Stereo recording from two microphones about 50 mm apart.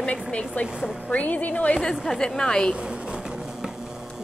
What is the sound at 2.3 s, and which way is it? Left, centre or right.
Speech, centre.